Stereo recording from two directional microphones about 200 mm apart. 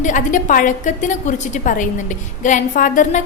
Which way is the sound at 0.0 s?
40° left (ahead or behind).